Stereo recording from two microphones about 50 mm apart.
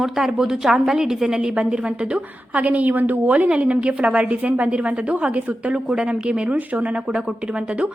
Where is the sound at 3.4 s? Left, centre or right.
Right.